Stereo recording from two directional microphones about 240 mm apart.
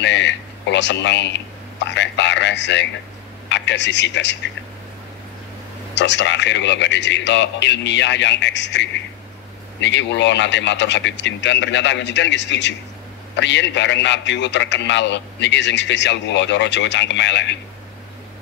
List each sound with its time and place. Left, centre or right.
0.0 s a sound: left
3.4 s speech: left
5.9 s a man's voice: left